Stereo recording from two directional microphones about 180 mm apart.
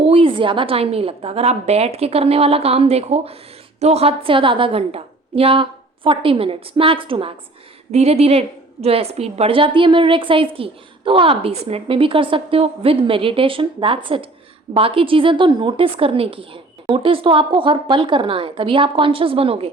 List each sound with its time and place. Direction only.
0.0 s a woman's voice: 30° right (ahead or behind)